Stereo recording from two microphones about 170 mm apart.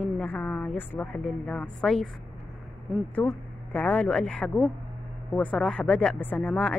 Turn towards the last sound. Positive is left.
turn(degrees=5)  # may be behind; listen again after turning